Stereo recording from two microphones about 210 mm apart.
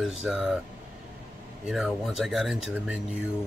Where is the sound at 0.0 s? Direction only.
Centre (ahead or behind).